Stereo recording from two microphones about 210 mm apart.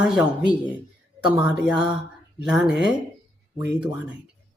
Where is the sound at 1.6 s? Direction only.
5° right (ahead or behind).